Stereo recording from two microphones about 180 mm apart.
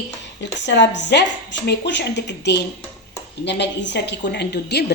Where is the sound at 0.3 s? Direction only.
75° left (ahead or behind).